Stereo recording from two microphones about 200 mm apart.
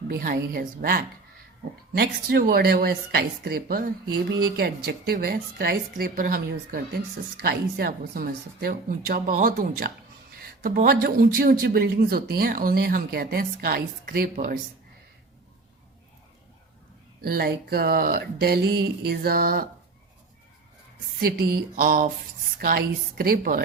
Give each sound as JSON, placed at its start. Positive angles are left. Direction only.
{"t": 0.1, "sound": "speech", "side_deg": -45}
{"t": 17.2, "sound": "speech", "side_deg": -50}
{"t": 21.2, "sound": "speech", "side_deg": -50}